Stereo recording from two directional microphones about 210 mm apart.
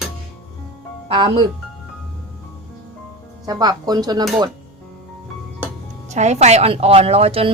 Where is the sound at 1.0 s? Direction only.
25° right (ahead or behind).